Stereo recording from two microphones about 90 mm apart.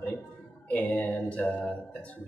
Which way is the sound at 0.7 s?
15° left (ahead or behind).